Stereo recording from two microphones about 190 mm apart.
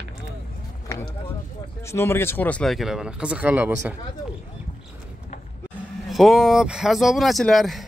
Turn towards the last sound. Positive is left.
turn(degrees=0)  # may be behind; listen again after turning